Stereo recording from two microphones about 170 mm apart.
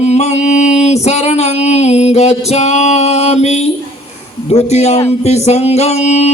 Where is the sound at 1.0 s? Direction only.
40° left (ahead or behind).